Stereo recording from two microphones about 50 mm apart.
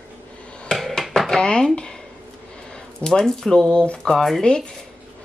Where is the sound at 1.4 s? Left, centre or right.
Centre.